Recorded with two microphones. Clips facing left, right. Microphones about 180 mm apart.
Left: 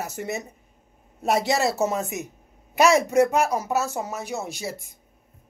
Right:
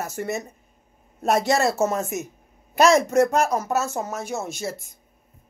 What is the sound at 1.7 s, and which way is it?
Speech, 15° left (ahead or behind).